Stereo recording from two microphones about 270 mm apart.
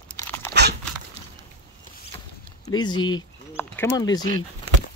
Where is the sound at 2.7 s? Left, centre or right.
Centre.